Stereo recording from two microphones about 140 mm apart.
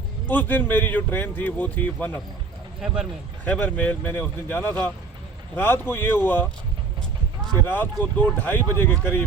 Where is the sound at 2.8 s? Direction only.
5° right (ahead or behind).